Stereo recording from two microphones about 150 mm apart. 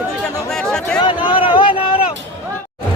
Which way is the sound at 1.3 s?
35° left (ahead or behind).